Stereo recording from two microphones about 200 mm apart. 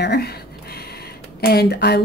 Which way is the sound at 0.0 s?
55° left (ahead or behind).